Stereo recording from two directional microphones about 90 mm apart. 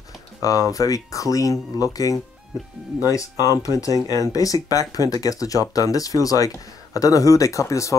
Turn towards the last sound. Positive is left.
turn(degrees=35)  # may be behind; listen again after turning